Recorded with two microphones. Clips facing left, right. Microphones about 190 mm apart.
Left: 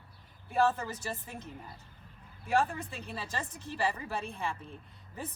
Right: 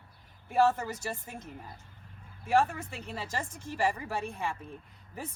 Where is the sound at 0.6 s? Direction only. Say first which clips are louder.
Right 2 dB; 15° right (ahead or behind).